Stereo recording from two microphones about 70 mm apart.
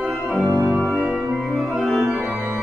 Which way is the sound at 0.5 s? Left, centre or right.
Right.